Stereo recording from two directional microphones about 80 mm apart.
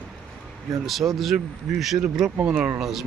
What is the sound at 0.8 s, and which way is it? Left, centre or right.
Speech, centre.